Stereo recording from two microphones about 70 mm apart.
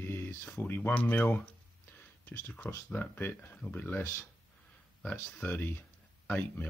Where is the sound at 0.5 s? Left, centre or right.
Left.